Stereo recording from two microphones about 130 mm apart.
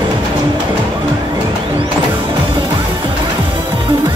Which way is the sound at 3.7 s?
40° right (ahead or behind).